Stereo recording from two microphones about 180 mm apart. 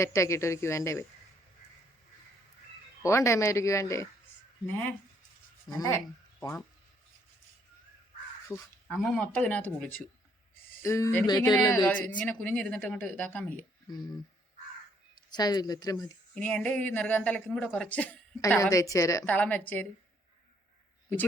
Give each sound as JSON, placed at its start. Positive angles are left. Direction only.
{"t": 0.0, "sound": "speech", "side_deg": 15}
{"t": 3.0, "sound": "speech", "side_deg": 15}
{"t": 5.6, "sound": "speech", "side_deg": 20}
{"t": 8.4, "sound": "speech", "side_deg": 10}
{"t": 15.3, "sound": "speech", "side_deg": 20}
{"t": 16.3, "sound": "speech", "side_deg": 5}